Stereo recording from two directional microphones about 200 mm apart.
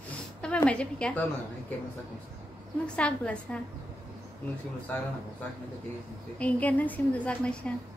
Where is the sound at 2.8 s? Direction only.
5° left (ahead or behind).